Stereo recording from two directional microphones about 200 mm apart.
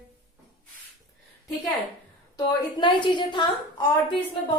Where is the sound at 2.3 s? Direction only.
20° left (ahead or behind).